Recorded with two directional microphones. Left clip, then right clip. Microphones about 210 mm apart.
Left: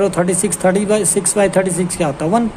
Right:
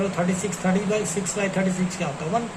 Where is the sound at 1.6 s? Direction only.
50° left (ahead or behind).